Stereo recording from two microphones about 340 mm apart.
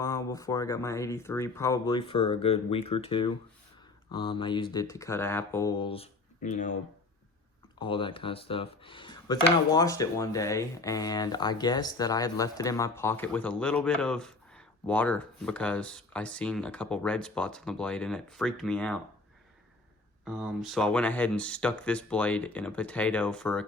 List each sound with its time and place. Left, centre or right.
0.0 s speech: centre
7.8 s speech: centre
20.2 s speech: centre